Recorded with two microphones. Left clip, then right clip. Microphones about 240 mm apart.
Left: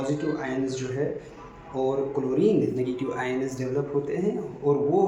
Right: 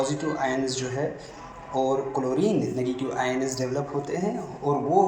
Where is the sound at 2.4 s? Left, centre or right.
Centre.